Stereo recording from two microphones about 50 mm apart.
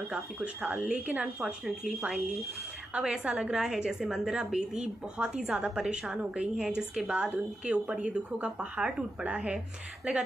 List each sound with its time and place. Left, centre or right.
0.1 s speech: right
1.4 s a woman's voice: centre
3.0 s a woman's voice: centre